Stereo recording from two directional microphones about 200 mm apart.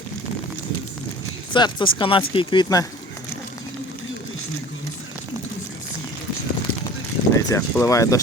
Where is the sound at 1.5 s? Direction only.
25° left (ahead or behind).